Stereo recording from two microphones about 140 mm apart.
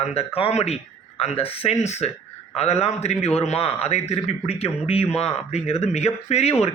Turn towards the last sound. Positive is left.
turn(degrees=50)  # may be behind; listen again after turning